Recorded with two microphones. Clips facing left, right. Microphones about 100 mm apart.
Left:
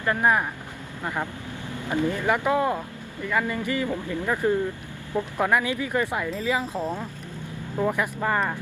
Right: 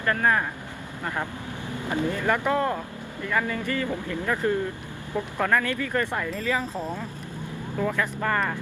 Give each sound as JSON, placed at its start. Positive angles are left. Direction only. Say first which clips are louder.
{"t": 0.0, "sound": "speech", "louder": "left 1 dB", "side_deg": 15}